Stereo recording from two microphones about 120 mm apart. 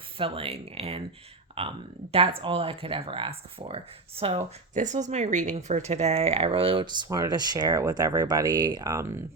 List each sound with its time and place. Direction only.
0.2 s speech: 50° right (ahead or behind)
4.4 s speech: 90° right; by 9.2 s 25° right (ahead or behind)